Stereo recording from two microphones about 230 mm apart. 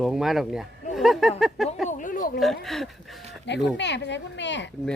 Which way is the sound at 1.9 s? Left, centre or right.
Left.